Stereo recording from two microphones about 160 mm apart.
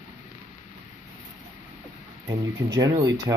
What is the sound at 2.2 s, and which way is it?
Speech, 25° right (ahead or behind).